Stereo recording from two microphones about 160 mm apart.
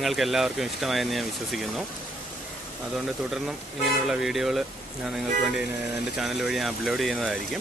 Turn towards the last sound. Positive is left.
turn(degrees=0)  # may be behind; listen again after turning